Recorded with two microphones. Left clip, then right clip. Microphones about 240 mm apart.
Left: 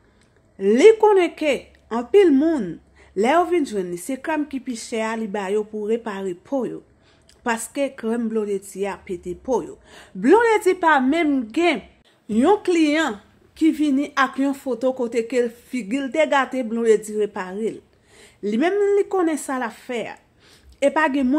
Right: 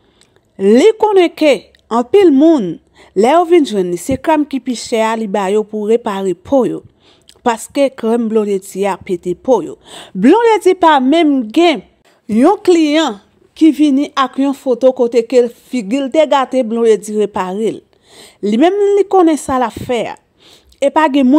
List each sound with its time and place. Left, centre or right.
0.6 s speech: right